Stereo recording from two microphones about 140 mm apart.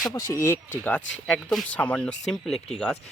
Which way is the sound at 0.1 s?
20° left (ahead or behind).